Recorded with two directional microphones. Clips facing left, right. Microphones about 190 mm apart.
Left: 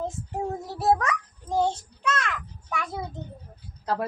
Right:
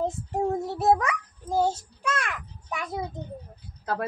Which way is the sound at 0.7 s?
15° right (ahead or behind).